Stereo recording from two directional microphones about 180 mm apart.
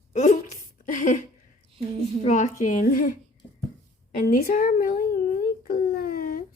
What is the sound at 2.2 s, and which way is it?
Speech, 45° left (ahead or behind).